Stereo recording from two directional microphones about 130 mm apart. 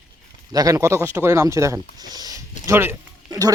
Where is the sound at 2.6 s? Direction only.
20° right (ahead or behind).